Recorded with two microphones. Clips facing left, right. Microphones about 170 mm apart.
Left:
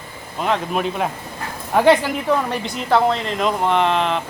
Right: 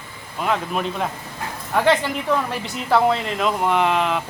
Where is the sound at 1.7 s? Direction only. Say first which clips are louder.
Left 4 dB; 15° left (ahead or behind).